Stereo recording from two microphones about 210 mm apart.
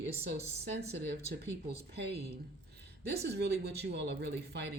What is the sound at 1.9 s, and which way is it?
Speech, 55° right (ahead or behind).